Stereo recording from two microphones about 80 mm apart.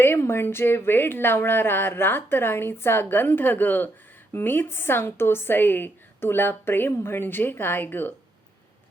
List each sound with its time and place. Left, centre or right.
0.0 s a woman's voice: left